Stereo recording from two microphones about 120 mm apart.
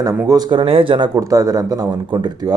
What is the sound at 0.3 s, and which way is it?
Speech, 35° right (ahead or behind).